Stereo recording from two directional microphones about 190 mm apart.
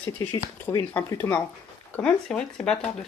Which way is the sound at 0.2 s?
20° left (ahead or behind).